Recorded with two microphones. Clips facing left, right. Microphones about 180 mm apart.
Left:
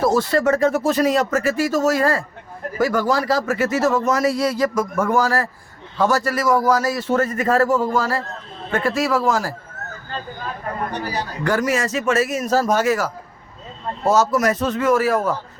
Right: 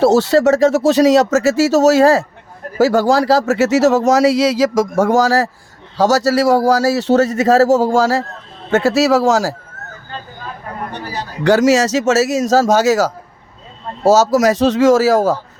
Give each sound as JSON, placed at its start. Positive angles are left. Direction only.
{"t": 0.0, "sound": "speech", "side_deg": -75}
{"t": 11.4, "sound": "speech", "side_deg": -85}